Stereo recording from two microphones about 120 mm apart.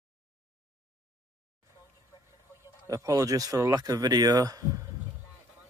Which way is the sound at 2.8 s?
25° right (ahead or behind).